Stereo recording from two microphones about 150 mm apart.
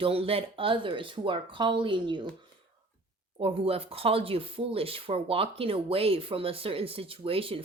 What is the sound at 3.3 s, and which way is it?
Speech, 40° right (ahead or behind).